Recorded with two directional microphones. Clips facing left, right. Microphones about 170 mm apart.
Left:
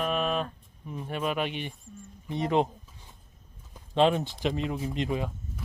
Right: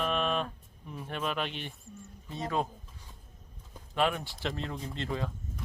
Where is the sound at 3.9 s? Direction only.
25° left (ahead or behind).